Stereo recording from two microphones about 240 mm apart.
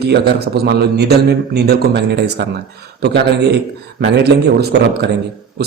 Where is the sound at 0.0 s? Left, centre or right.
Right.